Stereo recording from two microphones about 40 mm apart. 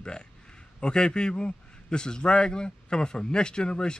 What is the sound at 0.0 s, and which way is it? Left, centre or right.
A man's voice, left.